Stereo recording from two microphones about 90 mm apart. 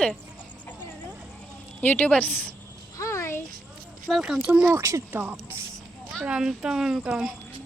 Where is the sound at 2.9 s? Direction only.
35° left (ahead or behind).